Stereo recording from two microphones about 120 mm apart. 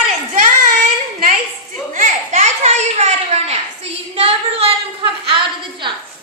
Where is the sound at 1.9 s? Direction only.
90° right; by 4.7 s 55° right (ahead or behind).